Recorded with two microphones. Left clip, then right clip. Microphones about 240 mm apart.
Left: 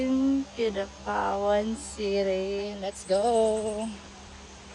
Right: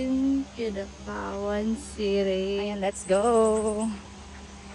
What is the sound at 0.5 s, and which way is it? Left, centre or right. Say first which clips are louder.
Speech: left 3 dB; centre.